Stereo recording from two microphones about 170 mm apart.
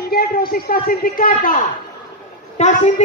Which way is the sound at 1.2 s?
50° left (ahead or behind).